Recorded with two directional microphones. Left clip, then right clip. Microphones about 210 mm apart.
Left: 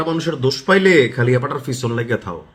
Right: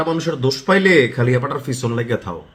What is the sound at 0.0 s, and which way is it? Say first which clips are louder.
A man's voice: even; 5° left (ahead or behind).